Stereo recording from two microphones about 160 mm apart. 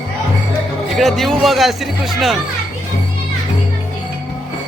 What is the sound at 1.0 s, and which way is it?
Speech, centre (ahead or behind).